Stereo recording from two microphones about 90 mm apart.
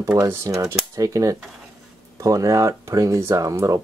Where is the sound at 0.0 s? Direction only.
35° right (ahead or behind).